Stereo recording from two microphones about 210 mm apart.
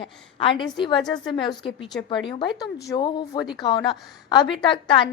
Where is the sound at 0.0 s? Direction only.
25° left (ahead or behind).